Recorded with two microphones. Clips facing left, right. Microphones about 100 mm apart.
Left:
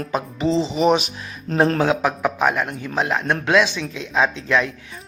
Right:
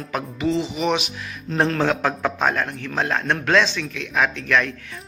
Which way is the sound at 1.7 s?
15° left (ahead or behind).